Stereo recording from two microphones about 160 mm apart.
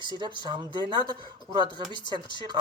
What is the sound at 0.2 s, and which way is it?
Speech, 30° right (ahead or behind).